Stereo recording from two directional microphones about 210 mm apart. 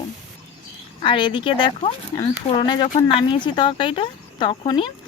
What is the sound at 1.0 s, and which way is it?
Speech, 20° left (ahead or behind).